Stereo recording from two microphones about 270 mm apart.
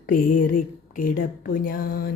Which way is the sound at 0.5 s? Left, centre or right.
Left.